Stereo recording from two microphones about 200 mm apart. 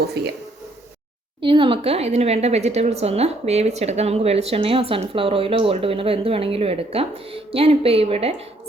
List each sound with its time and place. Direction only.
0.2 s speech: 55° right (ahead or behind)
1.5 s speech: 25° right (ahead or behind)